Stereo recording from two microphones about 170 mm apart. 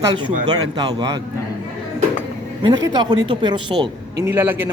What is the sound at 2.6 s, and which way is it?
Speech, 25° right (ahead or behind).